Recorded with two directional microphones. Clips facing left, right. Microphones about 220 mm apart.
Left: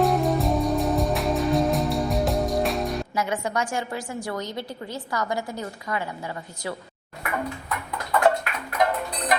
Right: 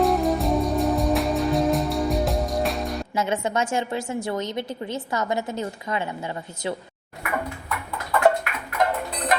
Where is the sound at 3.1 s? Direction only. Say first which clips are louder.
Right 5 dB; 25° right (ahead or behind).